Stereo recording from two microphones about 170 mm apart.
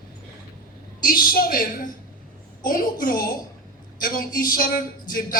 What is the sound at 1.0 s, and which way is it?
A man's voice, 60° left (ahead or behind).